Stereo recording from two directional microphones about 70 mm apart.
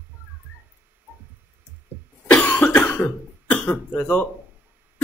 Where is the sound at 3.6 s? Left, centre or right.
Left.